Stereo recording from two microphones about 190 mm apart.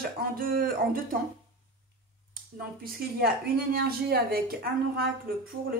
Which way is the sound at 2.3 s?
50° right (ahead or behind).